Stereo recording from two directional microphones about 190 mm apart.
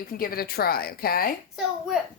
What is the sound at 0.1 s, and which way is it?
A woman's voice, 50° left (ahead or behind).